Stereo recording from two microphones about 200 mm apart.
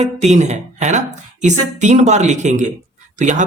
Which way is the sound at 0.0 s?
35° right (ahead or behind).